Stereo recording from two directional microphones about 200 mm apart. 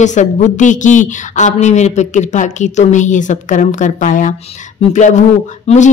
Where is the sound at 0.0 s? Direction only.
35° left (ahead or behind).